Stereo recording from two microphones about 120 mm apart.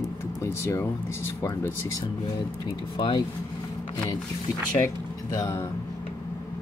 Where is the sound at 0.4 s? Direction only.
20° left (ahead or behind).